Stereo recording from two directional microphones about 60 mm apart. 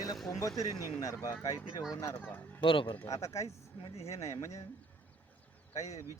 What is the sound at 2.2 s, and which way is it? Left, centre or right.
Speech, left.